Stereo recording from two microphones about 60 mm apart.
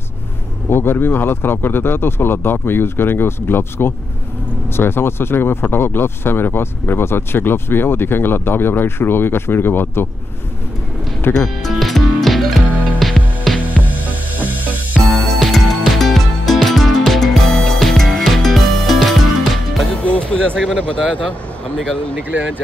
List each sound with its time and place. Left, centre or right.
0.7 s speech: left
11.3 s music: centre
14.5 s music: right
15.0 s music: centre
20.1 s music: centre
22.1 s speech: right